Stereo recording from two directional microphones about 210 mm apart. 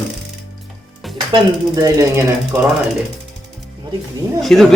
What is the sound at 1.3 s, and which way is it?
Mechanisms, 15° right (ahead or behind).